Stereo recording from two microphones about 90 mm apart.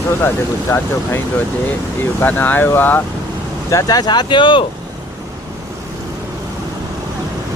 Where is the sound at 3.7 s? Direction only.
40° left (ahead or behind); by 4.6 s 65° left (ahead or behind).